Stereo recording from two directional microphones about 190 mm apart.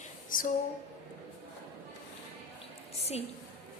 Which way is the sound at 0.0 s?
45° left (ahead or behind).